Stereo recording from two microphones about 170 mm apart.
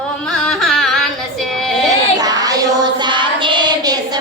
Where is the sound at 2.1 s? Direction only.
20° right (ahead or behind).